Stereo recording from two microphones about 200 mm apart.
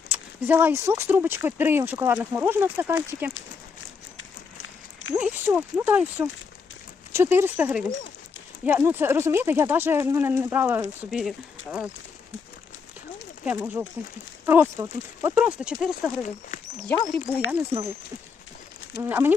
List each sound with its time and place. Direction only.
0.1 s speech: 10° right (ahead or behind)
4.2 s a sound: 80° left
5.1 s speech: 10° right (ahead or behind)
13.4 s speech: 5° right (ahead or behind); by 17.4 s 10° left (ahead or behind)
19.0 s speech: 10° right (ahead or behind)